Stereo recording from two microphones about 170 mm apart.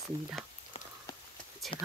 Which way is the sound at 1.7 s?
35° left (ahead or behind).